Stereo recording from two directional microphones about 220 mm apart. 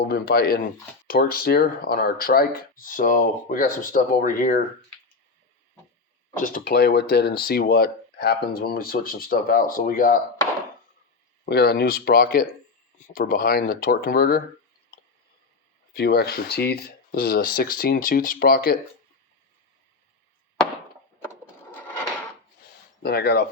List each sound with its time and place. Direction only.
0.0 s speech: 45° left (ahead or behind)
6.4 s speech: 40° left (ahead or behind)
11.4 s speech: 45° left (ahead or behind)
15.9 s speech: 45° left (ahead or behind)
21.7 s drawer open or close: 10° left (ahead or behind)
23.0 s speech: 45° left (ahead or behind)